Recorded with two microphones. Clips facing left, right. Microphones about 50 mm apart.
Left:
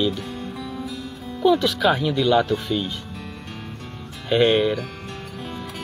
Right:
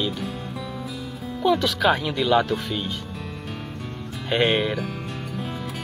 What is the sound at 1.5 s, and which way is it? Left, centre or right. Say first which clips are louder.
Speech: left 1 dB; right.